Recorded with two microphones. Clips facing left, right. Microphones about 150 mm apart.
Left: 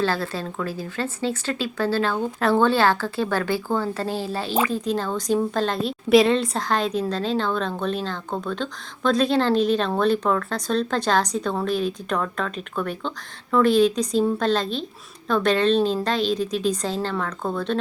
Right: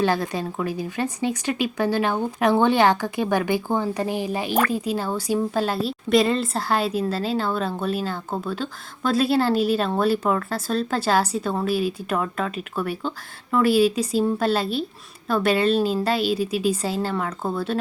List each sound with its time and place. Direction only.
0.0 s a woman's voice: 15° right (ahead or behind)